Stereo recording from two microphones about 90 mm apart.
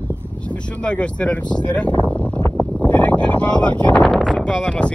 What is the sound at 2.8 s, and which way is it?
Boat, 15° left (ahead or behind).